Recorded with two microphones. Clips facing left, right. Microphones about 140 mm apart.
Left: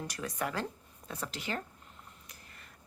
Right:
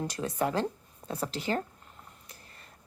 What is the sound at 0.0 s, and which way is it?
A woman's voice, 30° right (ahead or behind).